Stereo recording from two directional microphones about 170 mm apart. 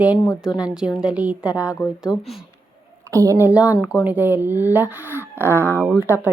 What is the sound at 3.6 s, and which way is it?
Speech, 20° left (ahead or behind).